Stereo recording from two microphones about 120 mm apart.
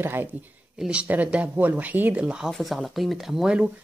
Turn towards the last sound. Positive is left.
turn(degrees=-5)  # may be behind; listen again after turning